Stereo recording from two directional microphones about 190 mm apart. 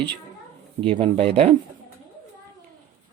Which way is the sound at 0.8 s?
30° right (ahead or behind).